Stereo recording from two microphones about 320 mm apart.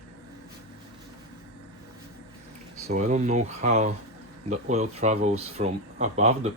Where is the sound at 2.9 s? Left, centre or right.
Right.